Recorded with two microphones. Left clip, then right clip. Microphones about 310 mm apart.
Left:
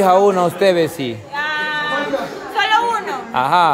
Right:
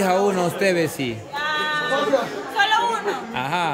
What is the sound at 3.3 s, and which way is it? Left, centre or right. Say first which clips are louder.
Speech: left 12 dB; centre.